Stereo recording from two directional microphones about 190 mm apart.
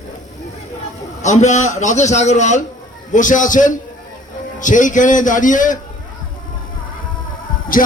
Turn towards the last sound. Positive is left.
turn(degrees=45)  # may be behind; listen again after turning